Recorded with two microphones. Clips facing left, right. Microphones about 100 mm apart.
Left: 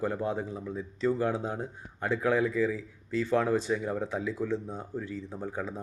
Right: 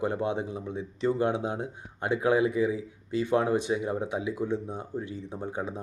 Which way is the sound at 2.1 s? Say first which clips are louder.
Right 3 dB; 15° right (ahead or behind).